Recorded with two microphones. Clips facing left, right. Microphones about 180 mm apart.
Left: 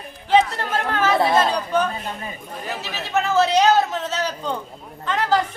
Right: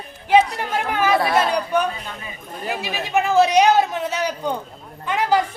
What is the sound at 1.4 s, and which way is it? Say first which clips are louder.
Chatter: even; 15° right (ahead or behind).